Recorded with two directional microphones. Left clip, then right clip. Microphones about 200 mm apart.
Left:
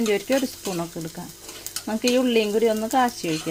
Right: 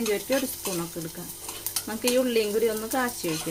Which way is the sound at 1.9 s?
35° left (ahead or behind).